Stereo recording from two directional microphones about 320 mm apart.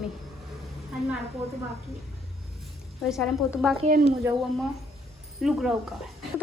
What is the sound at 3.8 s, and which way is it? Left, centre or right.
Speech, right.